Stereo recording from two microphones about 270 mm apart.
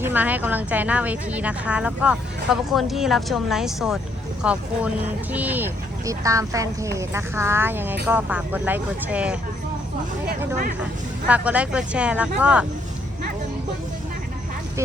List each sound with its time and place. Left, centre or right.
0.0 s a woman's voice: centre
10.2 s speech: right
11.3 s a woman's voice: centre